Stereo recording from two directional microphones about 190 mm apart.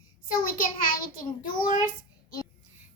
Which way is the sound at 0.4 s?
45° left (ahead or behind).